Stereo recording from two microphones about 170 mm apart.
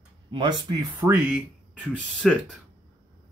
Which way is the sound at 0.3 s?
25° right (ahead or behind).